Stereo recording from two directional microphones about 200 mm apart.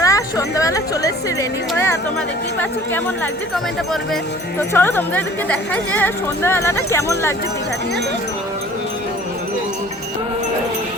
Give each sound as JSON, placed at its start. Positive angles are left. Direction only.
{"t": 0.0, "sound": "speech", "side_deg": 15}
{"t": 4.7, "sound": "speech", "side_deg": 10}